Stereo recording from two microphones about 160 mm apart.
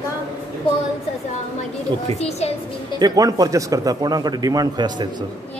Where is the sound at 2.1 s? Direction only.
40° left (ahead or behind).